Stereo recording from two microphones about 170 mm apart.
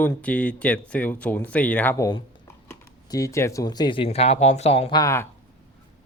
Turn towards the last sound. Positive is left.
turn(degrees=15)  # may be behind; listen again after turning